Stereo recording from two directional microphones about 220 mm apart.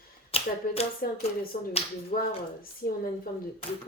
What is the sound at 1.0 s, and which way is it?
A woman's voice, 40° left (ahead or behind).